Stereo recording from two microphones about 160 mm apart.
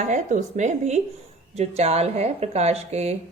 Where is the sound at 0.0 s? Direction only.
50° right (ahead or behind).